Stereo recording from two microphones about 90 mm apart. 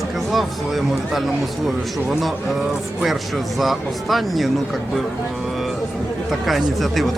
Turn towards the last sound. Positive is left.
turn(degrees=0)  # may be behind; listen again after turning